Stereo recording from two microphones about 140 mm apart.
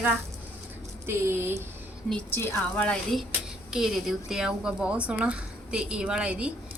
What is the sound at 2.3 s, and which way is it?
A woman's voice, 15° left (ahead or behind).